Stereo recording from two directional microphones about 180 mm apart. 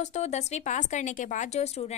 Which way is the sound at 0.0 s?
40° left (ahead or behind).